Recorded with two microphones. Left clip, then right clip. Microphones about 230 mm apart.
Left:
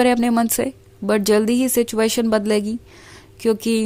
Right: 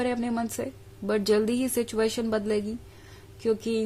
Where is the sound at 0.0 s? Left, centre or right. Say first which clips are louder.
Left 12 dB; left.